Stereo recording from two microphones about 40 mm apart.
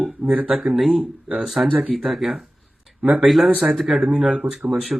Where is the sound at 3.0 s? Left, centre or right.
Right.